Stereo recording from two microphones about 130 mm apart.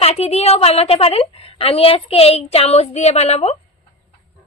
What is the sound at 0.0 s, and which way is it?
A woman's voice, 50° left (ahead or behind).